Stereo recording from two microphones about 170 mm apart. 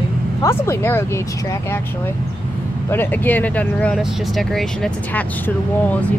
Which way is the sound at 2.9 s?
10° left (ahead or behind).